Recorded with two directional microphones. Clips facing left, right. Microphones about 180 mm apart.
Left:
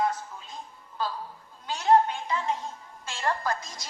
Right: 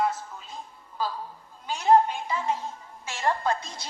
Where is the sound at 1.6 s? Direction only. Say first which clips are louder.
Right 1 dB; 10° right (ahead or behind).